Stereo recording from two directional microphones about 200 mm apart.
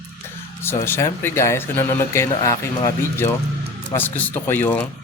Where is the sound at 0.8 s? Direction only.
10° left (ahead or behind).